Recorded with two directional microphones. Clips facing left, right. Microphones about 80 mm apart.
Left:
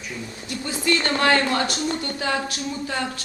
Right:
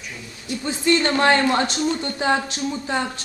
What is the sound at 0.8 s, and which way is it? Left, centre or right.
Speech, right.